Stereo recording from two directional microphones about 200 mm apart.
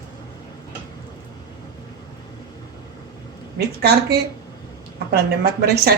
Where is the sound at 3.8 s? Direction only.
55° right (ahead or behind).